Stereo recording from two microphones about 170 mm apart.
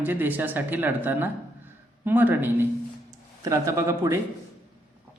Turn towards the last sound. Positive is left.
turn(degrees=-15)  # may be behind; listen again after turning